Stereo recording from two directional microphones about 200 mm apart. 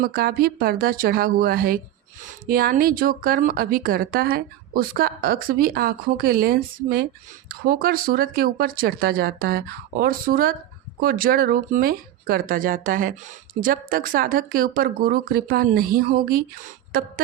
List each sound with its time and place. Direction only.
0.0 s speech: 50° right (ahead or behind)